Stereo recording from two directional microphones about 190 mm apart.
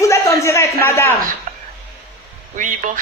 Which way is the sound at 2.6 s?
40° right (ahead or behind).